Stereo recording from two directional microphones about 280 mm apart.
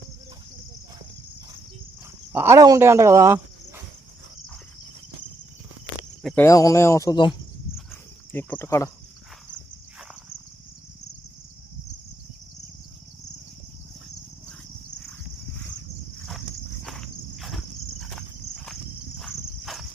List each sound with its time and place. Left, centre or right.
2.3 s speech: centre
6.2 s speech: centre
16.8 s insect: centre
19.2 s insect: centre